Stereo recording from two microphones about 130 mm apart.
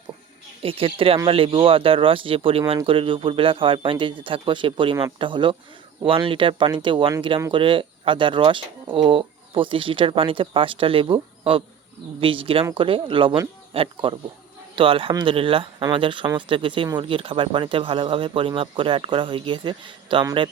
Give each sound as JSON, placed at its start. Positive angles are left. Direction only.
{"t": 0.6, "sound": "speech", "side_deg": -45}